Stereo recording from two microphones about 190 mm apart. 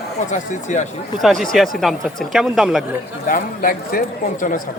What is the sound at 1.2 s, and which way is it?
Speech, centre (ahead or behind).